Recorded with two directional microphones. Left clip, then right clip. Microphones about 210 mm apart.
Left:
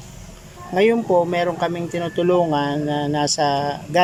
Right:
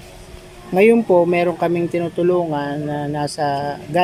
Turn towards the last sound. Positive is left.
turn(degrees=0)  # may be behind; listen again after turning